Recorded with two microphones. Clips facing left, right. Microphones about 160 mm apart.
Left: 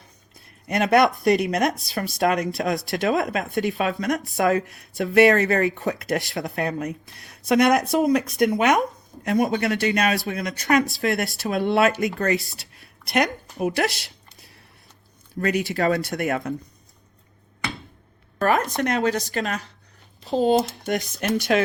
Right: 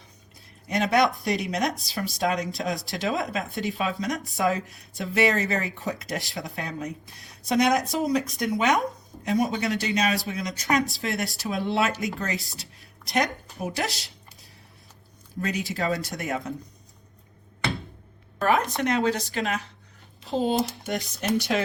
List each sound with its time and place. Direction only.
0.7 s speech: 55° left (ahead or behind)
15.4 s speech: 60° left (ahead or behind)
18.3 s speech: 45° left (ahead or behind)
20.8 s speech: 60° left (ahead or behind)